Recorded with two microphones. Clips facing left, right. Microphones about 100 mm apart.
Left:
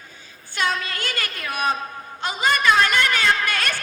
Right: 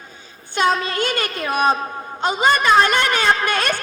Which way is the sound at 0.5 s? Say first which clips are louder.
Right 6 dB; 25° right (ahead or behind).